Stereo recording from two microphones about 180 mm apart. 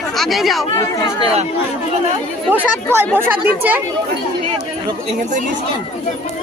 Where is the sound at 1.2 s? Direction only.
35° right (ahead or behind).